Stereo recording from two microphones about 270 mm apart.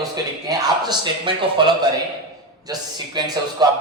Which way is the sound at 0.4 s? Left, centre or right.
Centre.